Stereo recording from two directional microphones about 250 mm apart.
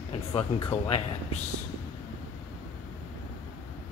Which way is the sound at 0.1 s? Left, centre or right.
Left.